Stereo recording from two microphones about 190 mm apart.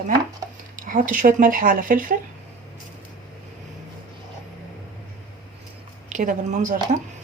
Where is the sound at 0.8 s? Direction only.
45° right (ahead or behind).